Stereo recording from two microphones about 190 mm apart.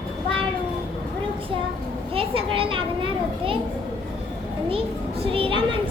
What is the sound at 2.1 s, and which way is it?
Children playing, 30° right (ahead or behind).